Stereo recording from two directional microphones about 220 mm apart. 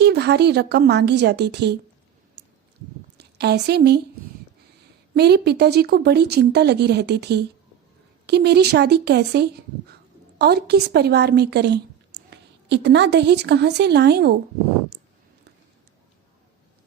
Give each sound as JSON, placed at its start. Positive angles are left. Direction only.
{"t": 0.0, "sound": "speech", "side_deg": -50}
{"t": 3.2, "sound": "a woman's voice", "side_deg": -50}
{"t": 5.1, "sound": "a woman's voice", "side_deg": -50}